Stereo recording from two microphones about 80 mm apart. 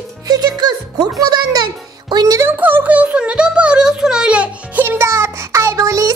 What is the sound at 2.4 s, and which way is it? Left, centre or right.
Music, right.